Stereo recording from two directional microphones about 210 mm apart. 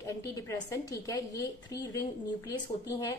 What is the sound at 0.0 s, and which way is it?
A woman's voice, 15° left (ahead or behind).